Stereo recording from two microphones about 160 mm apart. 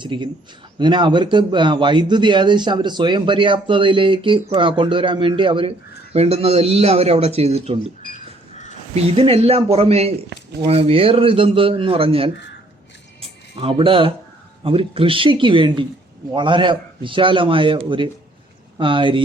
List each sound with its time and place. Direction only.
0.0 s a man's voice: 30° right (ahead or behind)
9.1 s a man's voice: 35° right (ahead or behind)